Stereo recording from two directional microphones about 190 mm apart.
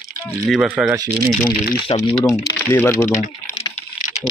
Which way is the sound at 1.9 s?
20° left (ahead or behind).